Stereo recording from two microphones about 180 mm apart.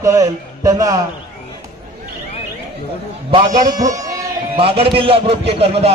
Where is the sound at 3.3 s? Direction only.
25° right (ahead or behind).